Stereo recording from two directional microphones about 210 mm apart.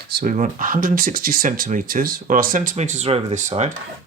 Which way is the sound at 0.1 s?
45° right (ahead or behind).